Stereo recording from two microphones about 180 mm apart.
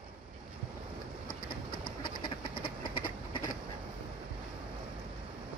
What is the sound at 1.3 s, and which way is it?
Train, 55° left (ahead or behind).